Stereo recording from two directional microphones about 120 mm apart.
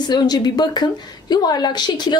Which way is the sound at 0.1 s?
35° left (ahead or behind).